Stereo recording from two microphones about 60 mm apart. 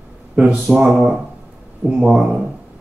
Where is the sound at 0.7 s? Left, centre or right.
Right.